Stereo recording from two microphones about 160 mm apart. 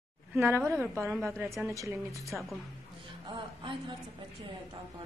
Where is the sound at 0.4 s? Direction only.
15° right (ahead or behind).